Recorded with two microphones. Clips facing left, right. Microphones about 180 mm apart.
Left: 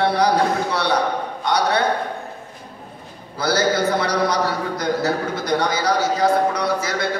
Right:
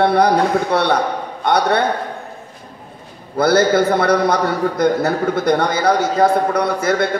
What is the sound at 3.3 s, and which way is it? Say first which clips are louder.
A man's voice: right 6 dB; 55° right (ahead or behind).